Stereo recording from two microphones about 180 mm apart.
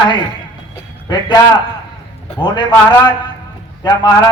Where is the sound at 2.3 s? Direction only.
25° left (ahead or behind).